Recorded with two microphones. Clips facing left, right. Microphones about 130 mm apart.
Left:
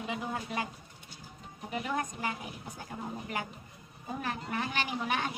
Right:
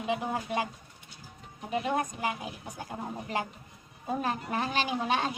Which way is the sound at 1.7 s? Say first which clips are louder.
Right 5 dB; 25° right (ahead or behind).